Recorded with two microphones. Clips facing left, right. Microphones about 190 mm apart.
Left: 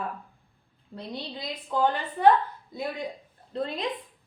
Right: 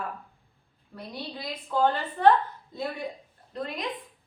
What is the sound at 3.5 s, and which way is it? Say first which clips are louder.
Speech: left 3 dB; 30° left (ahead or behind).